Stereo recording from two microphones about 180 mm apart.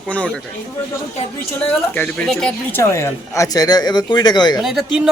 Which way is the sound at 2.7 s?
15° left (ahead or behind).